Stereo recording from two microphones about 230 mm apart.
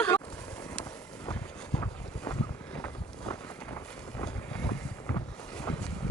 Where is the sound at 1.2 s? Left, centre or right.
Centre.